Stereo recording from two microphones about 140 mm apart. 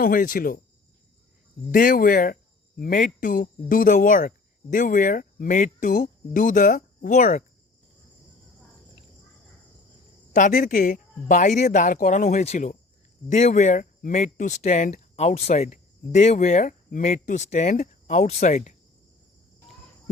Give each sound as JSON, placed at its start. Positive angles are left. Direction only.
{"t": 0.0, "sound": "speech", "side_deg": 75}
{"t": 1.7, "sound": "speech", "side_deg": 85}
{"t": 10.3, "sound": "speech", "side_deg": 65}